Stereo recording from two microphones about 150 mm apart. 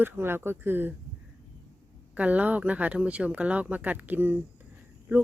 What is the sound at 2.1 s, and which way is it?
Speech, 10° right (ahead or behind).